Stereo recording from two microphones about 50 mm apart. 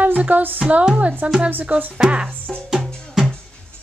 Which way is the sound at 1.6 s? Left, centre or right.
Right.